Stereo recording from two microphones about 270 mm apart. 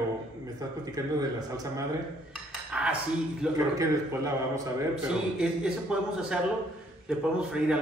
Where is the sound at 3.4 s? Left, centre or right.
Centre.